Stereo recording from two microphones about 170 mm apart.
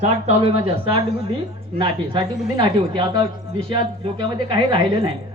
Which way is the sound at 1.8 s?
30° right (ahead or behind).